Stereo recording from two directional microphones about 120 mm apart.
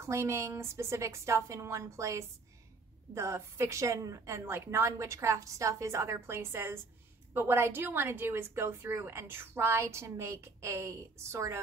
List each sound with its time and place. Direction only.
0.0 s a woman's voice: 25° right (ahead or behind)